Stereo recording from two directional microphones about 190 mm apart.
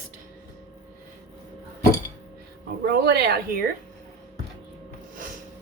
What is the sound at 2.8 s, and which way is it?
Speech, 60° right (ahead or behind).